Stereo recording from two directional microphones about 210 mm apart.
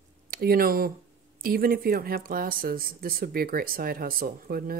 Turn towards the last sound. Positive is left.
turn(degrees=-45)  # may be behind; listen again after turning